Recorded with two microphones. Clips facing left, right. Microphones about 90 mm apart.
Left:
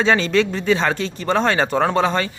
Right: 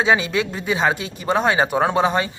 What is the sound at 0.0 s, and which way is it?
Speech, 10° right (ahead or behind).